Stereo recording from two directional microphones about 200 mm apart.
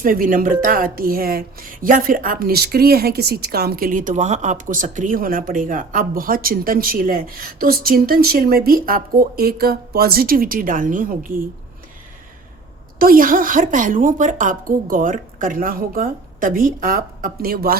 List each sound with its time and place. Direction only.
0.0 s speech: 45° right (ahead or behind)
13.0 s speech: 45° right (ahead or behind)